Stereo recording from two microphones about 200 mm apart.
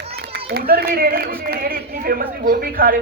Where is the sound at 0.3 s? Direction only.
50° right (ahead or behind).